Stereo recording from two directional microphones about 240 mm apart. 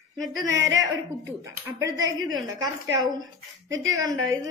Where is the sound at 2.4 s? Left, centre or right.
Centre.